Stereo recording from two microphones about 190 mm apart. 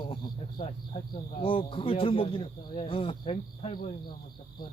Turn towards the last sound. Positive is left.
turn(degrees=30)  # may be behind; listen again after turning